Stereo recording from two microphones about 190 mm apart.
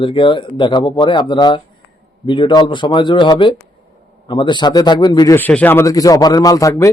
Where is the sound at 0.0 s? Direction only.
25° left (ahead or behind).